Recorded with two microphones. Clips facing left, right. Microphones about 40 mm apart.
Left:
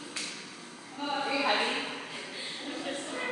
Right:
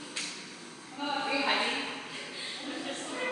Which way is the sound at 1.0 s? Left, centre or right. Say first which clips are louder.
Left 1 dB; centre.